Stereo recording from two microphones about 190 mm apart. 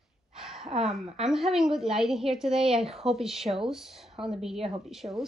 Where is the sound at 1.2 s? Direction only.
Centre (ahead or behind).